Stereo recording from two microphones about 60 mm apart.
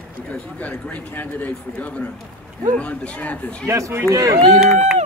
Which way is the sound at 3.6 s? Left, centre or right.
Right.